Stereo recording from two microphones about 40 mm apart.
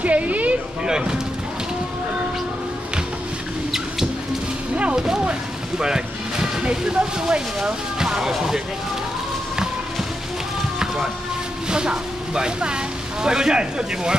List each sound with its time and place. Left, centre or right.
0.0 s a sound: right
0.8 s speech: centre
4.9 s a sound: centre
5.8 s music: centre
6.6 s speech: right
8.0 s speech: centre
11.7 s speech: right